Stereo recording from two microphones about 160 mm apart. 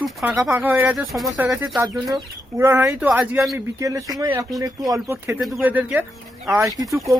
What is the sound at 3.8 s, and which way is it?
Speech, 20° right (ahead or behind).